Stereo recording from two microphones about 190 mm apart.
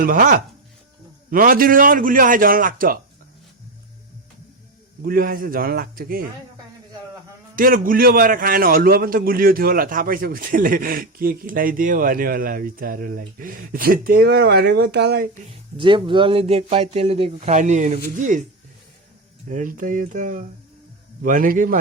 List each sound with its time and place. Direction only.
0.0 s a man's voice: 45° right (ahead or behind)
5.0 s a man's voice: 50° right (ahead or behind)
7.5 s a man's voice: 45° right (ahead or behind)
15.8 s speech: 25° right (ahead or behind); by 18.4 s 40° right (ahead or behind)
19.5 s a man's voice: 40° right (ahead or behind)